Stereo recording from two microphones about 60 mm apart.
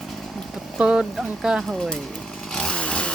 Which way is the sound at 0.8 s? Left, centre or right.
Centre.